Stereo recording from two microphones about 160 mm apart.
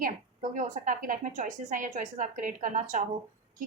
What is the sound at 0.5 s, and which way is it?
A woman's voice, 55° right (ahead or behind).